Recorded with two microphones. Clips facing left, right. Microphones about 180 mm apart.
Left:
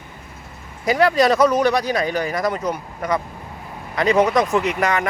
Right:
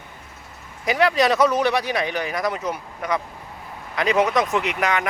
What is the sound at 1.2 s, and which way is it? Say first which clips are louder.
Speech: left 3 dB; centre (ahead or behind).